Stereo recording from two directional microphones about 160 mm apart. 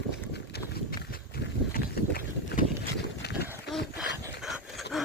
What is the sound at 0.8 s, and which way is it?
Horse, 70° left (ahead or behind).